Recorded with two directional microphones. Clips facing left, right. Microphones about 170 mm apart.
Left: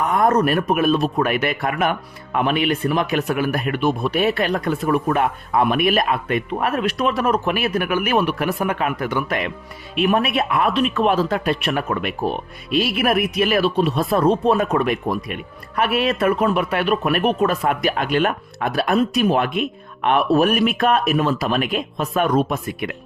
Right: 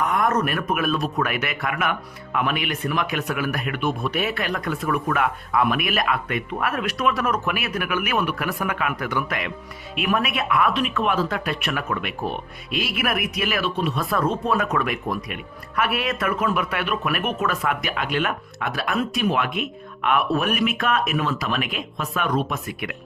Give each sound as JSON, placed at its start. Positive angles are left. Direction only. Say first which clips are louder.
{"t": 0.1, "sound": "speech", "louder": "left 5 dB", "side_deg": 30}